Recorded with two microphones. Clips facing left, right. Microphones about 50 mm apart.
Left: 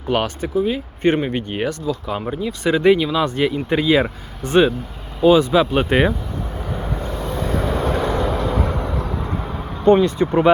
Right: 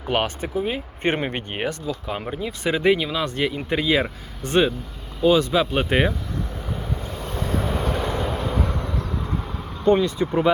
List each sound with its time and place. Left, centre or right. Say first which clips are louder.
0.1 s speech: left 3 dB; right
1.5 s speech: left 4 dB; right; by 6.1 s centre
7.8 s vehicle: left 5 dB; left
8.6 s vehicle: left 4 dB; left
9.8 s speech: left 5 dB; left